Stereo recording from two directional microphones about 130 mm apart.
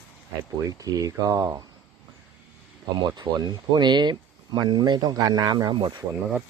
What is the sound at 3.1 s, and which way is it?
Speech, 35° right (ahead or behind).